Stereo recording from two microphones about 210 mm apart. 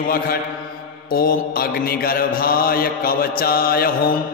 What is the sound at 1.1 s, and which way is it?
Mantra, 45° left (ahead or behind).